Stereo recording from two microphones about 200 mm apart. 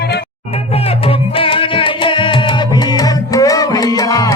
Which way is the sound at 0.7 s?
30° left (ahead or behind).